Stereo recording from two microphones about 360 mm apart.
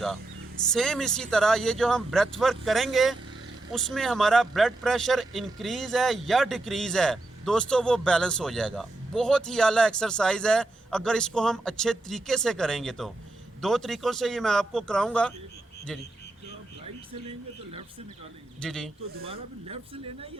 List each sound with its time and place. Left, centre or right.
0.7 s speech: centre
18.6 s speech: centre
19.1 s speech: centre